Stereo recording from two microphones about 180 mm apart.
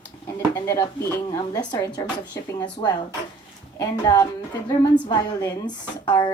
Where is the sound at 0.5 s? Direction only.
15° left (ahead or behind).